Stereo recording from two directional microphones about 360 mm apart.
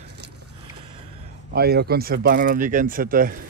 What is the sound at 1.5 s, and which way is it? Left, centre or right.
A man's voice, right.